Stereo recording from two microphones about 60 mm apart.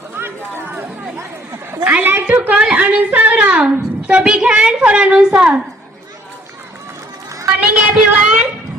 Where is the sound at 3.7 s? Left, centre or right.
Right.